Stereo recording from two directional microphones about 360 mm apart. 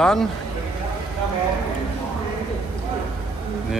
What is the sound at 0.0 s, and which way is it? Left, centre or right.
Speech, centre.